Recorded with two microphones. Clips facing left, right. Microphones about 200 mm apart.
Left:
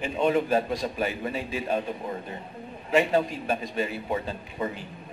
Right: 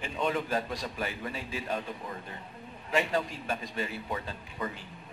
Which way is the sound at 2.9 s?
20° left (ahead or behind).